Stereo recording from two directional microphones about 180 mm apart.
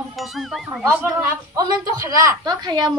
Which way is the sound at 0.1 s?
Centre (ahead or behind).